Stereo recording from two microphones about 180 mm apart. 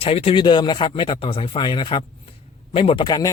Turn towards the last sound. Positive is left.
turn(degrees=25)  # may be behind; listen again after turning